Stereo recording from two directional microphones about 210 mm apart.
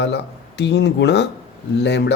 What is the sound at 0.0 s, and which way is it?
Speech, 55° left (ahead or behind).